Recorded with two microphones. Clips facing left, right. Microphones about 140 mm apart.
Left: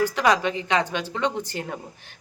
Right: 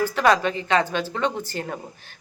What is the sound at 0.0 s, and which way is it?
A woman's voice, 15° left (ahead or behind).